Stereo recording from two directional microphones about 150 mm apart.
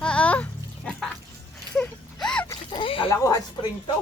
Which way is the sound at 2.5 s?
35° left (ahead or behind).